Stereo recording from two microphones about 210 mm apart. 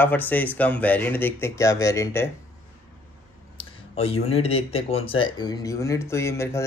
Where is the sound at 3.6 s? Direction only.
30° left (ahead or behind); by 6.6 s 15° left (ahead or behind).